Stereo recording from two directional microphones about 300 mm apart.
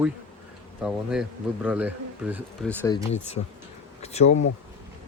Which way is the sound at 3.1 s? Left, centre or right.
Left.